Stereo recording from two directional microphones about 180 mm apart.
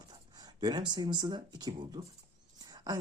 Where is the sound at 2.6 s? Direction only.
20° right (ahead or behind).